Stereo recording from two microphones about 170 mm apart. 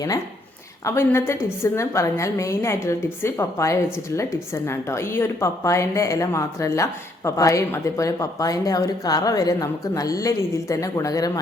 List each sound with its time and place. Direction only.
0.9 s a woman's voice: 15° left (ahead or behind)